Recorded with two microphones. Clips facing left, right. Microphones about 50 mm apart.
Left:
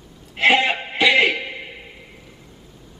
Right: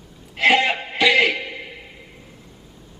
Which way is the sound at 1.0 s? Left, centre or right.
Left.